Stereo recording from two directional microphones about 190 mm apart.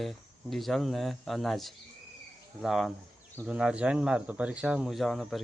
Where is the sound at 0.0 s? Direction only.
Centre (ahead or behind).